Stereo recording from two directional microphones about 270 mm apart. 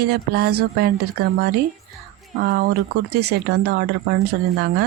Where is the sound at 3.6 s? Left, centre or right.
Right.